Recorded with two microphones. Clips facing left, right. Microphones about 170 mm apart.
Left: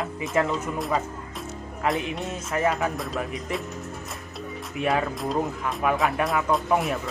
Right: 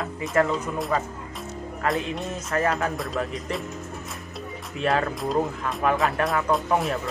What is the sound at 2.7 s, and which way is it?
Speech, centre (ahead or behind).